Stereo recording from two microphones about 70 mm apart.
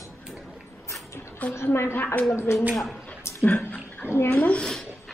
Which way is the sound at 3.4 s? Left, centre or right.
Left.